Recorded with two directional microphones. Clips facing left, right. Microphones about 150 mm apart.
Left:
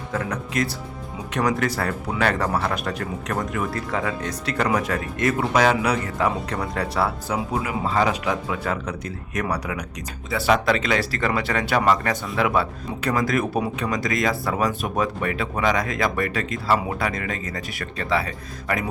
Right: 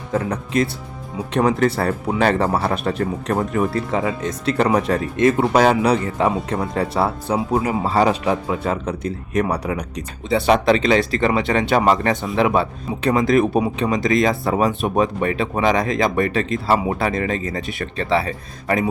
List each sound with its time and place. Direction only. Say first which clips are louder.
0.1 s speech: right 6 dB; 25° right (ahead or behind)